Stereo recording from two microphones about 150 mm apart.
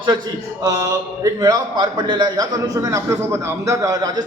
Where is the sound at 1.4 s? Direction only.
30° right (ahead or behind).